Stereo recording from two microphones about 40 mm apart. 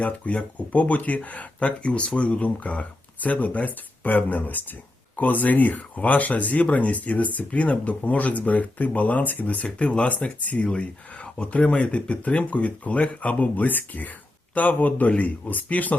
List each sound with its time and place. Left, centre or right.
0.0 s speech: left
9.6 s speech: left